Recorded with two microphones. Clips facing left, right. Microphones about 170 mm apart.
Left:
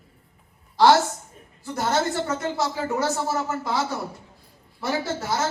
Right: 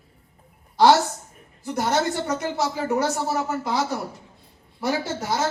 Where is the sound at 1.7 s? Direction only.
20° right (ahead or behind).